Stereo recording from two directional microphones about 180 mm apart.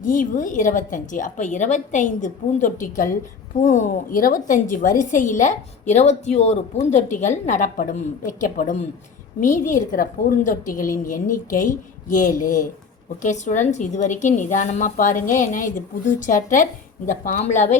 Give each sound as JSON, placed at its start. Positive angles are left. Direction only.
{"t": 0.0, "sound": "a woman's voice", "side_deg": 45}